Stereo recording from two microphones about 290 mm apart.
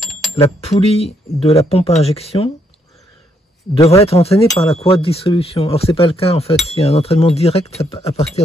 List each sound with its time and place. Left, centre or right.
0.0 s a sound: centre
0.3 s speech: left
3.7 s speech: centre